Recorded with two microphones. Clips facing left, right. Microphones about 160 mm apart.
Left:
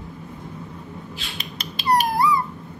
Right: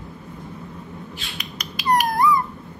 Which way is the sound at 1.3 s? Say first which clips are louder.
Even; 25° left (ahead or behind).